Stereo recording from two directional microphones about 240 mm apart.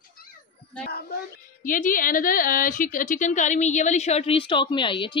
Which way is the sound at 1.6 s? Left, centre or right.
Left.